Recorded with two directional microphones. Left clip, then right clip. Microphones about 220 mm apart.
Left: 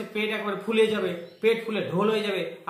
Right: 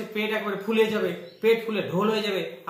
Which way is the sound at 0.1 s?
10° left (ahead or behind).